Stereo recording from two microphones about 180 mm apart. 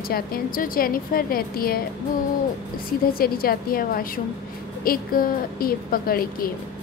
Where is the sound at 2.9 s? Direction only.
55° left (ahead or behind).